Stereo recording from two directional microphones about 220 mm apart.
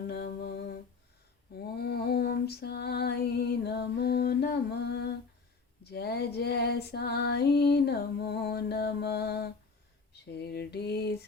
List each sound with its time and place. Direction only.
0.1 s humming: 50° left (ahead or behind)
1.5 s lullaby: 45° left (ahead or behind)
5.8 s female singing: 45° left (ahead or behind)
10.2 s lullaby: 45° left (ahead or behind)